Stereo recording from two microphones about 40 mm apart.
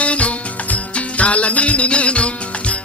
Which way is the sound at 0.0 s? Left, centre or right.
Left.